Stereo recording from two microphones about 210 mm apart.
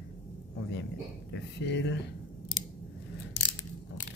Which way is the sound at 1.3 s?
55° left (ahead or behind).